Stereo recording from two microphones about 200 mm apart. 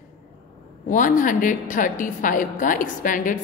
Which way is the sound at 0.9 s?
40° left (ahead or behind).